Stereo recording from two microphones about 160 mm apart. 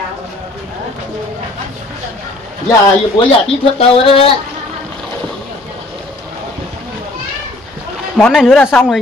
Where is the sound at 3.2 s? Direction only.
35° left (ahead or behind).